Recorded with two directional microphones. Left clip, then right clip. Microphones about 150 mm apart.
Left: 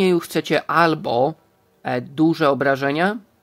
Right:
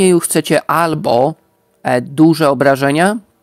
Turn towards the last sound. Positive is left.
turn(degrees=-40)  # may be behind; listen again after turning